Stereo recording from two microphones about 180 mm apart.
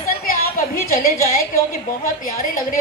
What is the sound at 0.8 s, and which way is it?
Speech, 50° left (ahead or behind).